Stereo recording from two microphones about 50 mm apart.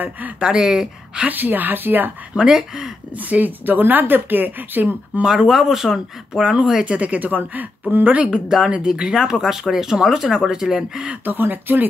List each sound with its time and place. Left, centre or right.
0.4 s speech: centre
1.2 s a woman's voice: right
2.3 s speech: centre
3.2 s a woman's voice: right
5.2 s speech: centre
6.5 s a woman's voice: centre; by 8.2 s right
8.5 s speech: centre
11.2 s a woman's voice: right